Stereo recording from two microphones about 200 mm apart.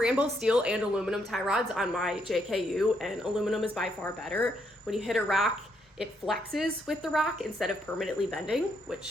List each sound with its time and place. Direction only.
0.0 s a woman's voice: 5° right (ahead or behind)